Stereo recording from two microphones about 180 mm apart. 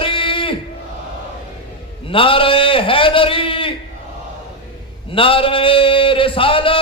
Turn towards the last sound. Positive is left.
turn(degrees=30)  # may be behind; listen again after turning